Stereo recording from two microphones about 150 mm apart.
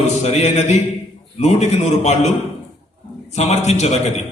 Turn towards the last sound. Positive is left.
turn(degrees=50)  # may be behind; listen again after turning